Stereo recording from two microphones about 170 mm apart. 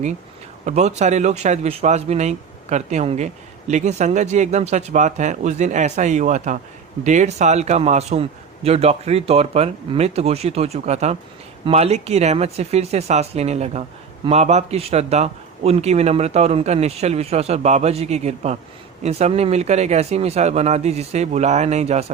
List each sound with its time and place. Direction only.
0.6 s a man's voice: 40° right (ahead or behind)